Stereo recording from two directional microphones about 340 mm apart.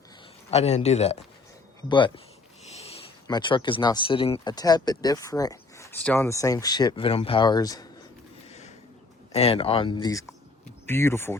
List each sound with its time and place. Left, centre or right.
0.5 s speech: centre
8.4 s a sound: centre
9.3 s speech: centre